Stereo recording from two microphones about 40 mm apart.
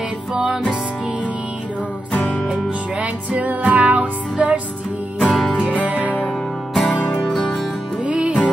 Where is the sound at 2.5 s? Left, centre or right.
Right.